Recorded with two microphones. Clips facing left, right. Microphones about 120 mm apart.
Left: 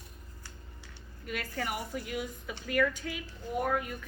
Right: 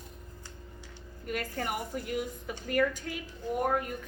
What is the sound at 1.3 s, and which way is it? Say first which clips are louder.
A woman's voice: right 2 dB; 45° right (ahead or behind).